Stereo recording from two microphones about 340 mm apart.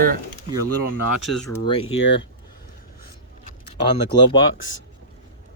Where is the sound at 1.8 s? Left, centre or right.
Left.